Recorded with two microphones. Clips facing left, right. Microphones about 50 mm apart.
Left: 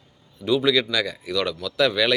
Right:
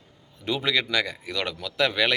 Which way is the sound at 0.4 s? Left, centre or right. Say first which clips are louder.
Left 5 dB; right.